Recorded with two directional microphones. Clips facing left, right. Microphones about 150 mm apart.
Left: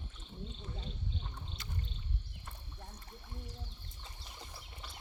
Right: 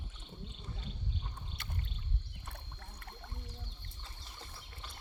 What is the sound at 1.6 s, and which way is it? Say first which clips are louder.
Rowboat: right 1 dB; 55° right (ahead or behind).